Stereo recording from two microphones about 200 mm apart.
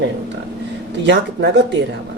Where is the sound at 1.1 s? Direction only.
60° right (ahead or behind).